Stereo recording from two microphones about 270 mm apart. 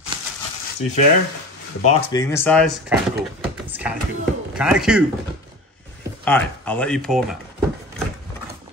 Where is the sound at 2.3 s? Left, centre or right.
Centre.